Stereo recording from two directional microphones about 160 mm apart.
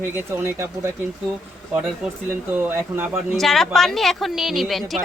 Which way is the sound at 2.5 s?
10° right (ahead or behind).